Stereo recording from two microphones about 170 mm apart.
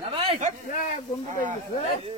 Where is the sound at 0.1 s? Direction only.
35° right (ahead or behind).